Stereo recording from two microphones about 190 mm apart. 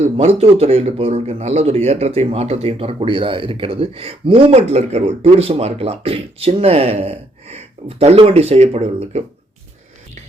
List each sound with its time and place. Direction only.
0.0 s speech: 35° right (ahead or behind)